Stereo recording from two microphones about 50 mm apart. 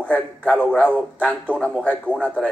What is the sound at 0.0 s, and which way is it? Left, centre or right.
A woman's voice, left.